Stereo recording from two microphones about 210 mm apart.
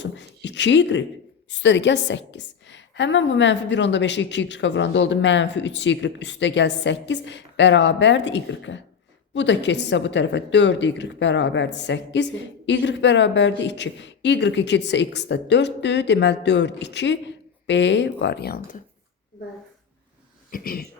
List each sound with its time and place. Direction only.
0.0 s a sound: 55° left (ahead or behind)
1.5 s a woman's voice: 60° left (ahead or behind)
20.5 s speech: 45° left (ahead or behind)